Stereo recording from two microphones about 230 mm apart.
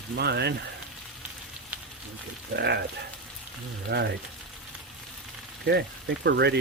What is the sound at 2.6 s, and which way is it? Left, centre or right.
Speech, right.